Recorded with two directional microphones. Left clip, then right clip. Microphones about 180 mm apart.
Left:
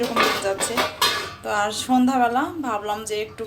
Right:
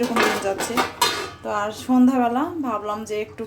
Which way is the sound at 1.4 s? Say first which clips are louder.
Left 3 dB; 5° right (ahead or behind).